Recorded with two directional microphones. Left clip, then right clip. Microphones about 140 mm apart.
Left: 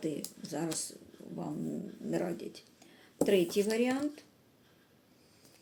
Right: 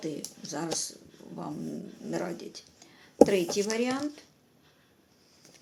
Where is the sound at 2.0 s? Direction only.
15° left (ahead or behind).